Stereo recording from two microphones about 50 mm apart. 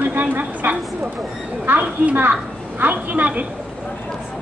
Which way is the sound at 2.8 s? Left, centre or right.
Right.